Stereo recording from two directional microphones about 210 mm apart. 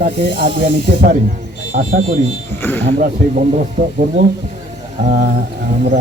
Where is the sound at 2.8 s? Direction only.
30° right (ahead or behind).